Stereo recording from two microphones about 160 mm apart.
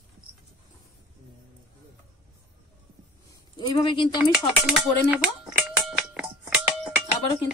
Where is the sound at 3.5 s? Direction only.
30° left (ahead or behind).